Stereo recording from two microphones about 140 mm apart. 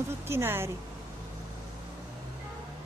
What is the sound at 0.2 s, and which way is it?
Speech, 15° right (ahead or behind).